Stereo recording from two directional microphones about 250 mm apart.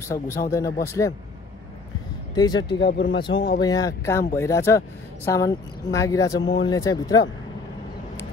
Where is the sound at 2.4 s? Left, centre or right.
Centre.